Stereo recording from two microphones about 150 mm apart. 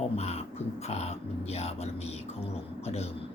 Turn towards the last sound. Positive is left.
turn(degrees=45)  # may be behind; listen again after turning